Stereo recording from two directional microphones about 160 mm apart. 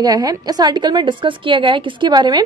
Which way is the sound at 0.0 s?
25° right (ahead or behind).